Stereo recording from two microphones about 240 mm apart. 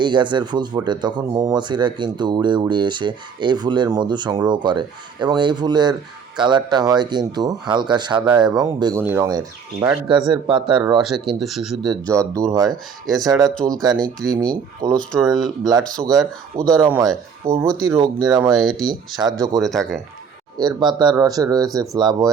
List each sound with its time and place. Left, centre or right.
0.0 s speech: centre
11.0 s speech: centre
11.9 s speech: centre
12.6 s speech: centre
13.8 s speech: centre
14.4 s speech: right
14.9 s speech: centre
16.8 s speech: centre
18.5 s speech: centre
18.9 s speech: centre
19.5 s speech: centre
20.6 s speech: centre